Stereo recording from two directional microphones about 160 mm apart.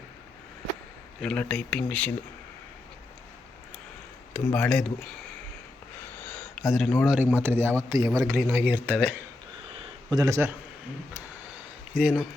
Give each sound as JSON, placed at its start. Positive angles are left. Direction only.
{"t": 1.2, "sound": "speech", "side_deg": 5}
{"t": 4.4, "sound": "speech", "side_deg": 10}
{"t": 6.2, "sound": "a sound", "side_deg": 5}
{"t": 7.0, "sound": "a man's voice", "side_deg": -5}
{"t": 8.6, "sound": "speech", "side_deg": -10}
{"t": 9.7, "sound": "a sound", "side_deg": -35}
{"t": 10.2, "sound": "a man's voice", "side_deg": -20}
{"t": 11.9, "sound": "a man's voice", "side_deg": -5}